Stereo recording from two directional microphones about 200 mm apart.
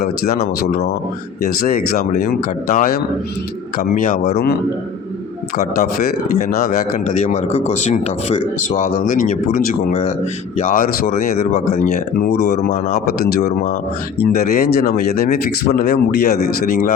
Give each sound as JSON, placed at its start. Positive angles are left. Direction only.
{"t": 0.0, "sound": "speech", "side_deg": 50}
{"t": 1.9, "sound": "speech", "side_deg": 45}
{"t": 6.5, "sound": "speech", "side_deg": 50}
{"t": 7.2, "sound": "speech", "side_deg": 35}